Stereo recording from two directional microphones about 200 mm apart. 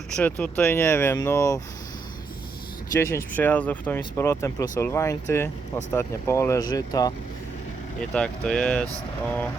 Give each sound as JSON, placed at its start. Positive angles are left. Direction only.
{"t": 0.1, "sound": "speech", "side_deg": 5}
{"t": 3.0, "sound": "speech", "side_deg": 15}
{"t": 8.1, "sound": "speech", "side_deg": 5}